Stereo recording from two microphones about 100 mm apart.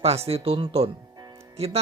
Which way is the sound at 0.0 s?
90° right.